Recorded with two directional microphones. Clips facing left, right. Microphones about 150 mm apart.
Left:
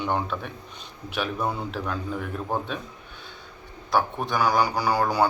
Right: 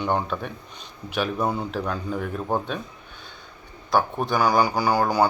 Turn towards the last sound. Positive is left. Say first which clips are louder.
# right 2 dB
turn(degrees=0)  # may be behind; listen again after turning